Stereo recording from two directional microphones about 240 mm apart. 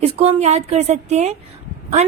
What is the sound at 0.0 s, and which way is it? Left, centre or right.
A woman's voice, right.